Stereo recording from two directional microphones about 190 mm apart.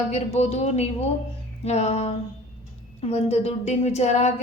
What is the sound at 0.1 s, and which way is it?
A woman's voice, 35° left (ahead or behind).